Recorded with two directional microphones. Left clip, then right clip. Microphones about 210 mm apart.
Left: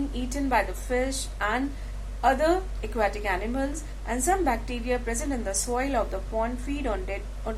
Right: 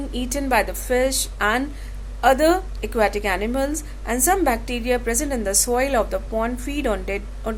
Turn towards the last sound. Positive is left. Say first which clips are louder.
# right 7 dB
turn(degrees=-50)  # may be behind; listen again after turning